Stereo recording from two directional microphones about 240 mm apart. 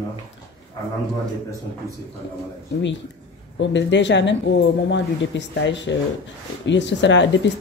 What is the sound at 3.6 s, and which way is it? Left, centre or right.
Speech, left.